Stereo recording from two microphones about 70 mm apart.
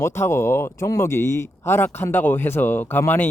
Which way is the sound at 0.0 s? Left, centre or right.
Left.